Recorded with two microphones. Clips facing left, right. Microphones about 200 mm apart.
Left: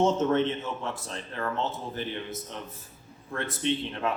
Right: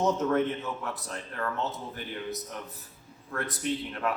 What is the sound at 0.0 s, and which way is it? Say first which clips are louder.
Speech: left 2 dB; 25° left (ahead or behind).